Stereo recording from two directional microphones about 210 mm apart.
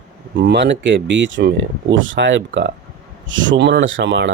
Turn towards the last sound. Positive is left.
turn(degrees=-55)  # may be behind; listen again after turning